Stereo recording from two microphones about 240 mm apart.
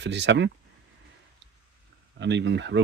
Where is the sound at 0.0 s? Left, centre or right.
Right.